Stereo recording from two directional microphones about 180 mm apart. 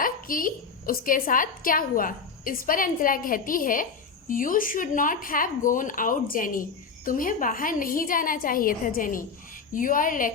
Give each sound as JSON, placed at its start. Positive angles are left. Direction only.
{"t": 0.0, "sound": "speech", "side_deg": 50}